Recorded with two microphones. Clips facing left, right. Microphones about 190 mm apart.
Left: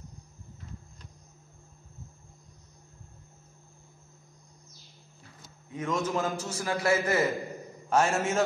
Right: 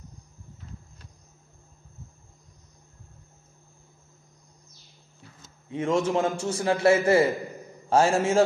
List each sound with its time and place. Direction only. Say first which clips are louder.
5.4 s a man's voice: right 6 dB; 30° right (ahead or behind)